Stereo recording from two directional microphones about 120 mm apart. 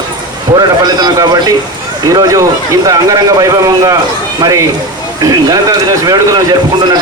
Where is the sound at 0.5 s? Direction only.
35° right (ahead or behind).